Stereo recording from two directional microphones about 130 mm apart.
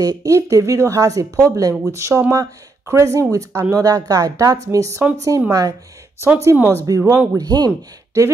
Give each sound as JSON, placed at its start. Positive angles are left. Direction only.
{"t": 0.0, "sound": "speech", "side_deg": -25}
{"t": 6.2, "sound": "speech", "side_deg": -15}